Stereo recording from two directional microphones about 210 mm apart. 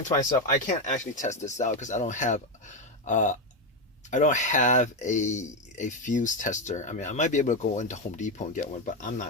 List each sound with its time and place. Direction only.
0.0 s speech: 40° left (ahead or behind)